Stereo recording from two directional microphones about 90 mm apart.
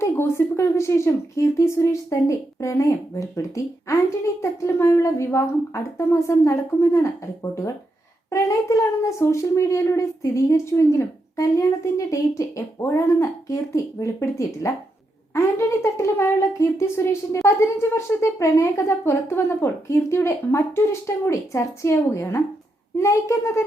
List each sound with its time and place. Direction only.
0.0 s speech: 30° left (ahead or behind)
8.3 s speech: 35° left (ahead or behind)